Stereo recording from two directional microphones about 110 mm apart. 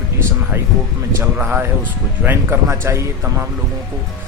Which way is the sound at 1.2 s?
15° right (ahead or behind).